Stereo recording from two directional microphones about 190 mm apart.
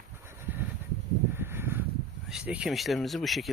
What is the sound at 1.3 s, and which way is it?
Crow, 10° right (ahead or behind).